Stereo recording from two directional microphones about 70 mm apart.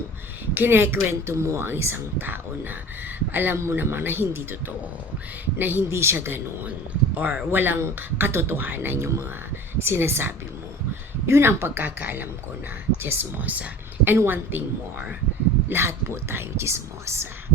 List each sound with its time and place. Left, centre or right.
0.5 s speech: right
1.4 s speech: right
3.6 s speech: right
5.5 s speech: right